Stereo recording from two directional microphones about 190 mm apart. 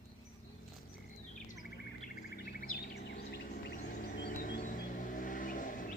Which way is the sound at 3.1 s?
65° left (ahead or behind).